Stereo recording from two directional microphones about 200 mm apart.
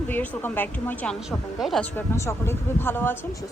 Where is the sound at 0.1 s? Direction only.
10° left (ahead or behind).